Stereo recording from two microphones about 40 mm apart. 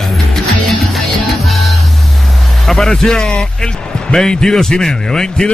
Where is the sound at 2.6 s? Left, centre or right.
Centre.